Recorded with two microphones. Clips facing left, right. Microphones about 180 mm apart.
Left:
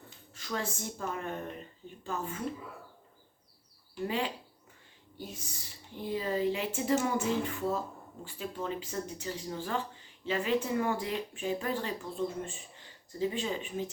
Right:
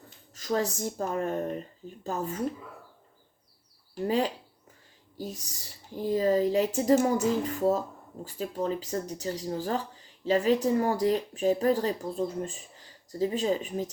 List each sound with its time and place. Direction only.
0.3 s speech: 40° right (ahead or behind)
3.9 s speech: 40° right (ahead or behind)